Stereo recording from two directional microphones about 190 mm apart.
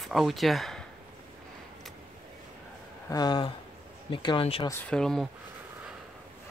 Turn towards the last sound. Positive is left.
turn(degrees=0)  # may be behind; listen again after turning